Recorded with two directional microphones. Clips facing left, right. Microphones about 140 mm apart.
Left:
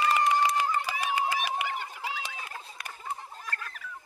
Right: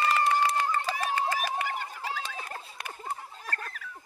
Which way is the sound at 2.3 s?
45° right (ahead or behind).